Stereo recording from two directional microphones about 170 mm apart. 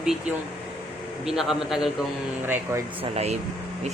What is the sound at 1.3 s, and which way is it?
Speech, centre (ahead or behind).